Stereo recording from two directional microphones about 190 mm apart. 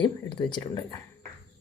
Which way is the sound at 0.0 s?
25° left (ahead or behind).